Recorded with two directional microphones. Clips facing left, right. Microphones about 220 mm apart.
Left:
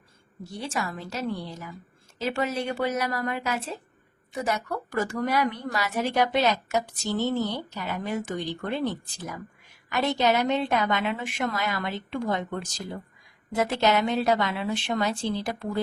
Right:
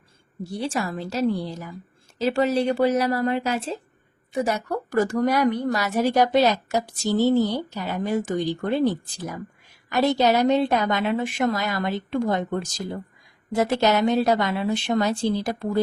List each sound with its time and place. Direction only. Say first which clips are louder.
0.7 s a woman's voice: right 5 dB; 35° right (ahead or behind)